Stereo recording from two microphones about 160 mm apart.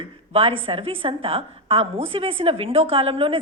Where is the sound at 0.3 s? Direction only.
40° right (ahead or behind).